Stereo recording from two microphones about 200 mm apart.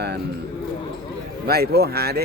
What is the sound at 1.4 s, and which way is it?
Speech, 50° right (ahead or behind).